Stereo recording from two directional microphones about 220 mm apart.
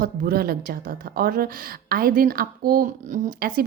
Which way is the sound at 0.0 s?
40° right (ahead or behind).